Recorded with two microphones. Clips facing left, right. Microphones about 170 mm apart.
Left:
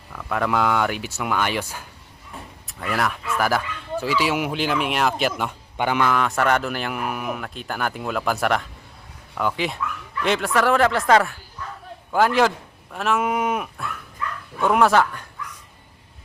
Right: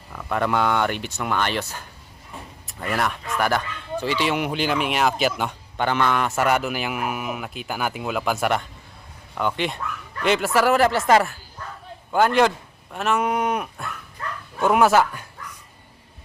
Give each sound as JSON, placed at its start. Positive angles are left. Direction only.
{"t": 0.1, "sound": "speech", "side_deg": -5}
{"t": 2.6, "sound": "speech", "side_deg": 0}
{"t": 5.7, "sound": "speech", "side_deg": 10}
{"t": 14.2, "sound": "dog", "side_deg": -40}
{"t": 14.6, "sound": "speech", "side_deg": -5}